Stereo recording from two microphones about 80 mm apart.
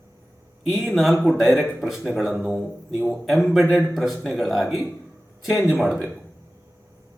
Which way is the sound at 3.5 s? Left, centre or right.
Centre.